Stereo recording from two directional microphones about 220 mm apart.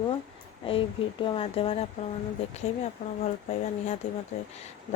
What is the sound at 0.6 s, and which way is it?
Speech, 25° left (ahead or behind).